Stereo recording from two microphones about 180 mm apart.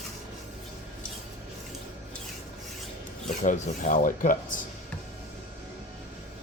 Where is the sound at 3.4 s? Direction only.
45° left (ahead or behind).